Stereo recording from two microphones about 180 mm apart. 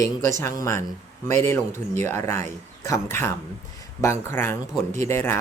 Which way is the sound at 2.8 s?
15° left (ahead or behind).